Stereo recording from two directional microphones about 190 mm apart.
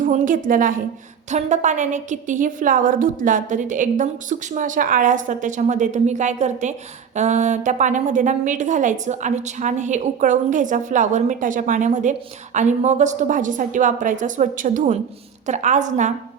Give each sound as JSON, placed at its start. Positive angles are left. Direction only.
{"t": 0.0, "sound": "a woman's voice", "side_deg": -45}